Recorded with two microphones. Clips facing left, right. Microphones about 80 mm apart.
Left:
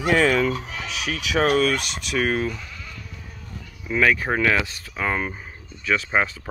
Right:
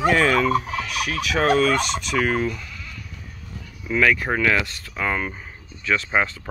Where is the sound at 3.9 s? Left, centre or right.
Centre.